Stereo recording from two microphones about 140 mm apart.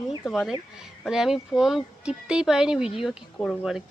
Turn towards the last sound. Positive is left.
turn(degrees=-5)  # may be behind; listen again after turning